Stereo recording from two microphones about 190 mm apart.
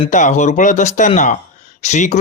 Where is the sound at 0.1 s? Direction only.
40° left (ahead or behind).